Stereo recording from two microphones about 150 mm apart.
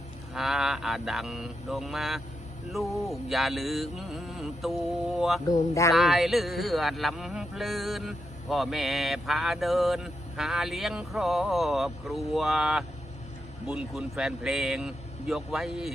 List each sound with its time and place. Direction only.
0.3 s a man's voice: centre (ahead or behind)
5.5 s speech: 20° left (ahead or behind)
5.9 s a man's voice: centre (ahead or behind)